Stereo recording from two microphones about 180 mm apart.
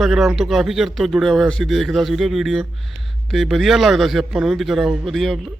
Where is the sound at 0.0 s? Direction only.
Centre (ahead or behind).